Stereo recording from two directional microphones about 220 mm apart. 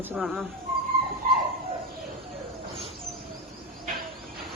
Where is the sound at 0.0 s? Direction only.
5° right (ahead or behind).